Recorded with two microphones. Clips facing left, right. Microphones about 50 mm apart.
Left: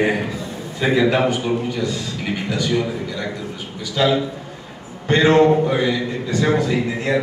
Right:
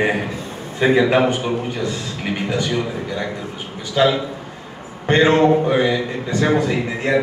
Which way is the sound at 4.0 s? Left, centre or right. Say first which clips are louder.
Right 1 dB; right.